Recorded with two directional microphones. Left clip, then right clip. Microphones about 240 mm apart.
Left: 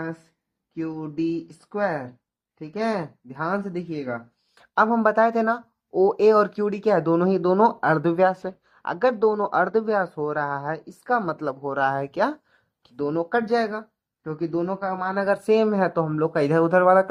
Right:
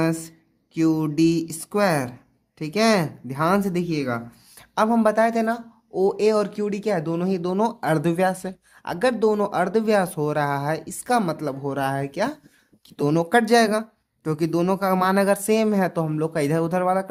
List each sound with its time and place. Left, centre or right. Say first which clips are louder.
0.7 s speech: right 9 dB; right; by 12.4 s centre
13.0 s speech: right 4 dB; right